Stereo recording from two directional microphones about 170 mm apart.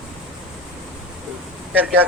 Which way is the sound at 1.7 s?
10° right (ahead or behind).